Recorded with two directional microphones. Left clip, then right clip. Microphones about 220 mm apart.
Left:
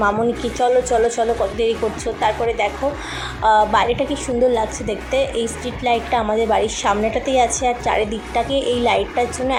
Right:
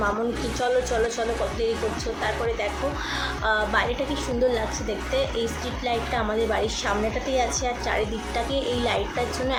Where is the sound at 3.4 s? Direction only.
15° left (ahead or behind).